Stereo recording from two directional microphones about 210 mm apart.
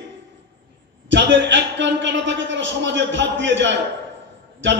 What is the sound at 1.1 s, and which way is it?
A man's voice, 60° right (ahead or behind).